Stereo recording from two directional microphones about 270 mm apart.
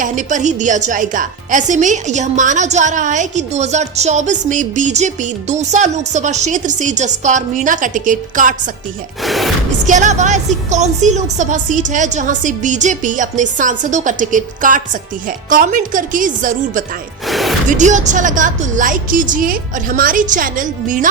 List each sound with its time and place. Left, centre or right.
0.0 s a woman's voice: right
9.2 s a sound: centre
9.8 s a woman's voice: right
17.2 s music: centre
17.7 s a woman's voice: right